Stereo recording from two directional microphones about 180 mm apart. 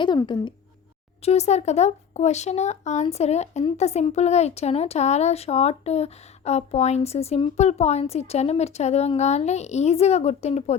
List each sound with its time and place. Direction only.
0.0 s speech: 25° left (ahead or behind)
1.2 s speech: 35° left (ahead or behind)